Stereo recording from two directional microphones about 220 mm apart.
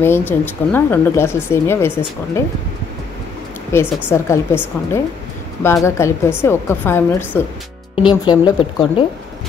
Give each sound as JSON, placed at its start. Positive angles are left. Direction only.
{"t": 0.0, "sound": "speech", "side_deg": 10}
{"t": 3.7, "sound": "speech", "side_deg": 10}
{"t": 7.9, "sound": "speech", "side_deg": 20}